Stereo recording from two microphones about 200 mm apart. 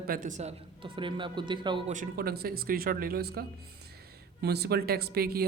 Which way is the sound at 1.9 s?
45° right (ahead or behind).